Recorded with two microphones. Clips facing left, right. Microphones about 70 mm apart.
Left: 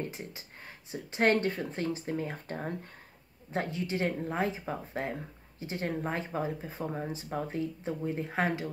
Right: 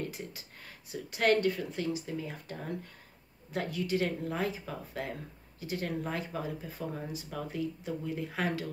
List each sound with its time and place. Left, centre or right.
0.0 s speech: left
3.5 s speech: left